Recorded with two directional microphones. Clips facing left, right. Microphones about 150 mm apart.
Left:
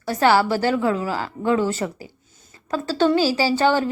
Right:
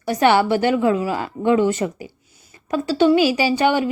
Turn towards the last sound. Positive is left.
turn(degrees=-15)  # may be behind; listen again after turning